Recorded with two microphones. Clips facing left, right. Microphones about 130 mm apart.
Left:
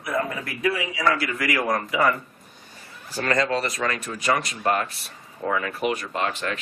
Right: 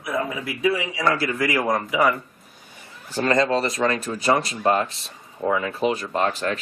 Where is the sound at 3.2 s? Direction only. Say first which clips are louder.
Right 3 dB; 25° right (ahead or behind).